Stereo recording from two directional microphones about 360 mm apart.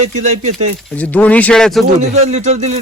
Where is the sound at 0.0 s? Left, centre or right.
Centre.